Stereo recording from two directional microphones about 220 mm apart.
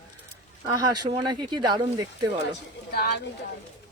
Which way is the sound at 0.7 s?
20° right (ahead or behind).